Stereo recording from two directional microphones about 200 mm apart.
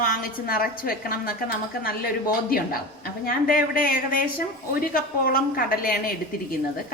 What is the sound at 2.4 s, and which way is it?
Speech, 45° left (ahead or behind).